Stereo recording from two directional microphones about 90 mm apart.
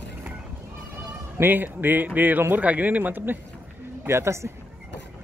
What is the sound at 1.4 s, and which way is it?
A man's voice, 20° right (ahead or behind).